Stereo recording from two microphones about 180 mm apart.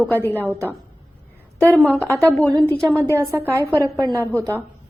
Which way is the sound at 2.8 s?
10° right (ahead or behind).